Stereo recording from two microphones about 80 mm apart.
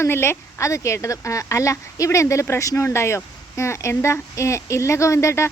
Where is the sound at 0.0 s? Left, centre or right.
Left.